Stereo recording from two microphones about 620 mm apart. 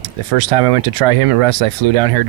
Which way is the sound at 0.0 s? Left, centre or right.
Right.